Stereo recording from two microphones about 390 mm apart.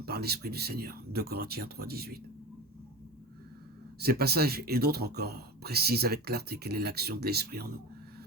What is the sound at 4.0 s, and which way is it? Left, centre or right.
Speech, right.